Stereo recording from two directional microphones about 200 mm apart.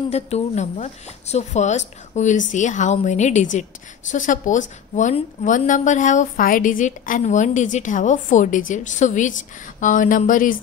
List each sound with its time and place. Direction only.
0.1 s a woman's voice: 35° left (ahead or behind)